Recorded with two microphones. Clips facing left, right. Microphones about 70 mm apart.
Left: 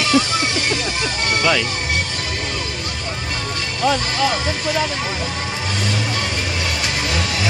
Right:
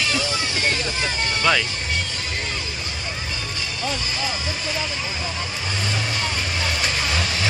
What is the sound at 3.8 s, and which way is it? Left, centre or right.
Speech, left.